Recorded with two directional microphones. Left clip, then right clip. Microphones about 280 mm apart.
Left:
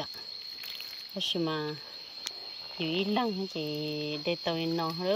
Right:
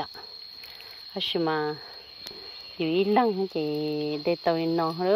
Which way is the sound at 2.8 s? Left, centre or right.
Right.